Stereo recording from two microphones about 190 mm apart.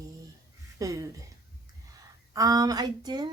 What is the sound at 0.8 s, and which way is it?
Speech, 15° right (ahead or behind).